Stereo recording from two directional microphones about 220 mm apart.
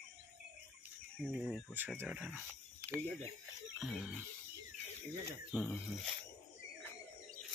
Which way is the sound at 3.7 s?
Centre (ahead or behind).